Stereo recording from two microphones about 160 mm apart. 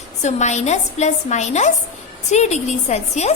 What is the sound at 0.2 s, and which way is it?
A woman's voice, 45° left (ahead or behind).